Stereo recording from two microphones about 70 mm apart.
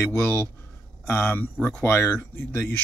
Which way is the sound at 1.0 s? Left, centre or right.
Left.